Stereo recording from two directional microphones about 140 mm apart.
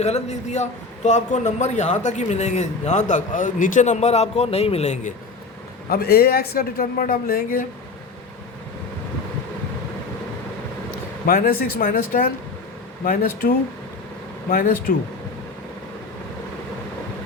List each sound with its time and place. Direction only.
0.0 s a man's voice: 50° left (ahead or behind)
5.9 s speech: 90° left
11.3 s speech: 90° left
14.5 s speech: 90° left